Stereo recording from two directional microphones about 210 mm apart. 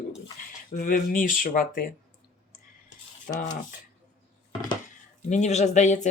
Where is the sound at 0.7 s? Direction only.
35° left (ahead or behind).